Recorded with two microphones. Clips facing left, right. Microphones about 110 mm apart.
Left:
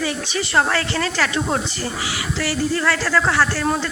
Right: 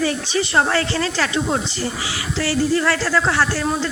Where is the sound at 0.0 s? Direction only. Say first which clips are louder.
Right 3 dB; 30° right (ahead or behind).